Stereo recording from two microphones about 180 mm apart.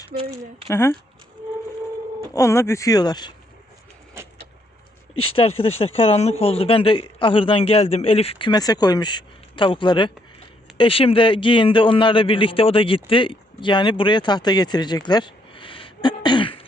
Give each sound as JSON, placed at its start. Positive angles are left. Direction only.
{"t": 0.1, "sound": "speech", "side_deg": -55}
{"t": 0.7, "sound": "speech", "side_deg": 15}
{"t": 2.3, "sound": "speech", "side_deg": 15}
{"t": 4.2, "sound": "vehicle", "side_deg": -15}
{"t": 5.4, "sound": "a man's voice", "side_deg": 30}